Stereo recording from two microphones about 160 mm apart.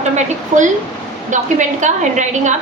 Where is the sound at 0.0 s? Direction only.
50° right (ahead or behind).